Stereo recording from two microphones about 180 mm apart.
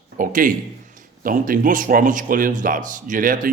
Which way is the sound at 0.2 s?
50° right (ahead or behind).